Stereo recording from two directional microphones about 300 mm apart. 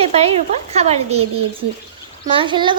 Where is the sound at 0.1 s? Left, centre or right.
Centre.